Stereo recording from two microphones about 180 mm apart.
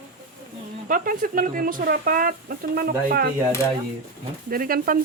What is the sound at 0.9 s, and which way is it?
Speech, 50° right (ahead or behind).